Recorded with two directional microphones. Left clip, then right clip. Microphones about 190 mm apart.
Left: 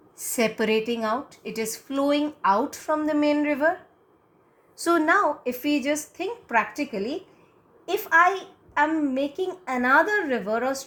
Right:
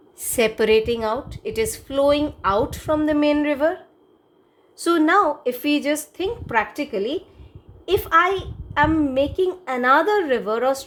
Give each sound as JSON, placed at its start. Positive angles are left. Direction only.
{"t": 0.2, "sound": "a woman's voice", "side_deg": -30}
{"t": 4.8, "sound": "a woman's voice", "side_deg": -30}